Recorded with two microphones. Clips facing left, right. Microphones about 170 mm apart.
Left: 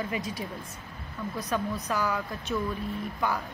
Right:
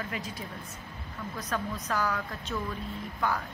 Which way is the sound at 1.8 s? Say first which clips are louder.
Left 2 dB; 10° left (ahead or behind).